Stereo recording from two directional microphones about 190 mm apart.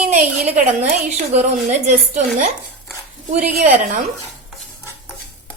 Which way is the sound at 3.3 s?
40° right (ahead or behind).